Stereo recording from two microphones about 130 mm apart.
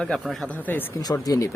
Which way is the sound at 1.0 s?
30° left (ahead or behind).